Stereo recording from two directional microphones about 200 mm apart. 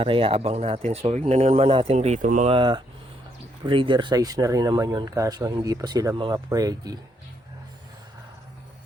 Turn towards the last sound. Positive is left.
turn(degrees=-20)  # may be behind; listen again after turning